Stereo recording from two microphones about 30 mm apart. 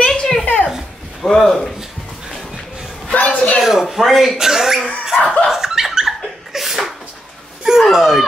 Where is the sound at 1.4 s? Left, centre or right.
Centre.